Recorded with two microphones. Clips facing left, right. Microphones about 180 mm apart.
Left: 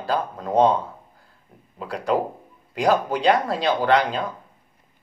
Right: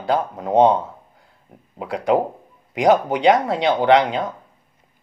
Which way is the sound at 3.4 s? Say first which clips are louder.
Right 4 dB; 20° right (ahead or behind).